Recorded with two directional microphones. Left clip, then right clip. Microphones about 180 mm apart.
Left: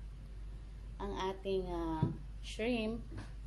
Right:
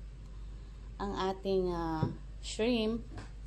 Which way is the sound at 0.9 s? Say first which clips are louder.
Right 4 dB; 30° right (ahead or behind).